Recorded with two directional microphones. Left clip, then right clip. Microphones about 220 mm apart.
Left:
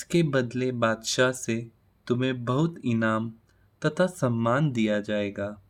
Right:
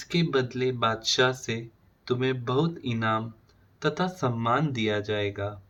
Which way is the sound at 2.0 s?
55° left (ahead or behind).